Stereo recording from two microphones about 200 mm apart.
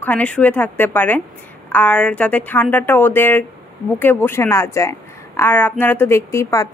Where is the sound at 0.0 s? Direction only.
5° left (ahead or behind).